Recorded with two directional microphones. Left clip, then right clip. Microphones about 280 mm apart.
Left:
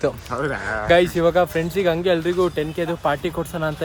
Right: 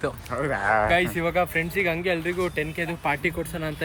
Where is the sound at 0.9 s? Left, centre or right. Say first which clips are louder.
Left 7 dB; centre.